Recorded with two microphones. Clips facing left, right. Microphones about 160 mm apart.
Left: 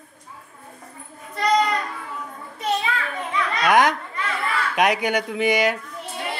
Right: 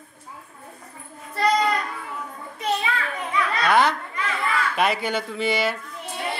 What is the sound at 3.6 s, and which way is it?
A man's voice, 15° left (ahead or behind).